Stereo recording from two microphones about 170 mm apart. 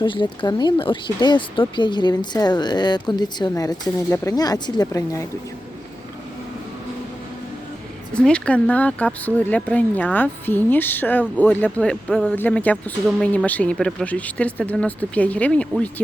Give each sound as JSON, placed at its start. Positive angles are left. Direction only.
{"t": 0.0, "sound": "speech", "side_deg": 25}
{"t": 8.1, "sound": "speech", "side_deg": 5}